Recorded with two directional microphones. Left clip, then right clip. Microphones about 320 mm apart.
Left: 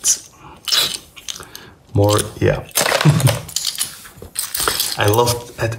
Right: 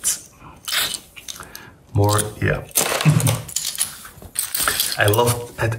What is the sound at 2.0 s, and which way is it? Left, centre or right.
Speech, centre.